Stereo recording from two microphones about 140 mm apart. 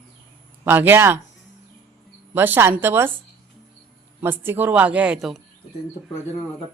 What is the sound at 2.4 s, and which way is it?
Speech, 15° right (ahead or behind).